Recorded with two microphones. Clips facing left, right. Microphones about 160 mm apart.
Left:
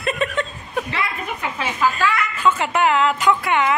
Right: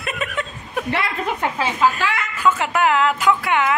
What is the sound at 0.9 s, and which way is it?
Speech, 70° right (ahead or behind).